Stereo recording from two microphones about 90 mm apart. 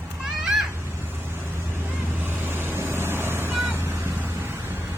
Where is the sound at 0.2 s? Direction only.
5° right (ahead or behind).